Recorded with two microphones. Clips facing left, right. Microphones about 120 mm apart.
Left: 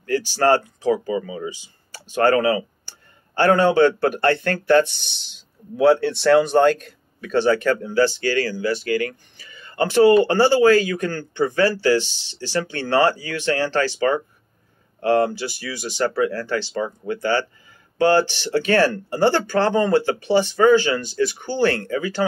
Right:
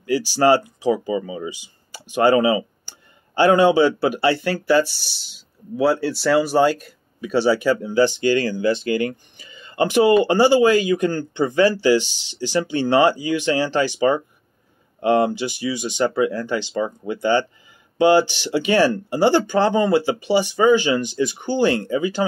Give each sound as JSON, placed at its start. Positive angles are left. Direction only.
{"t": 0.0, "sound": "speech", "side_deg": -10}